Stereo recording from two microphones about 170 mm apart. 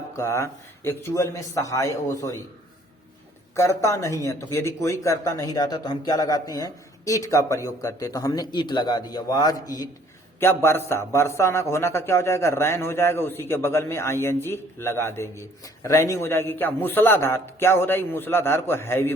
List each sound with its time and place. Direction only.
0.2 s a man's voice: 15° left (ahead or behind)
3.5 s a man's voice: 15° left (ahead or behind)